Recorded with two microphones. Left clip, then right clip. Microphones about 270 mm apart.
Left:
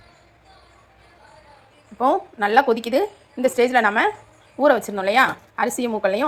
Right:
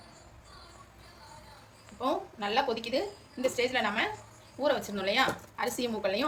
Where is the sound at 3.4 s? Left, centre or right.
Centre.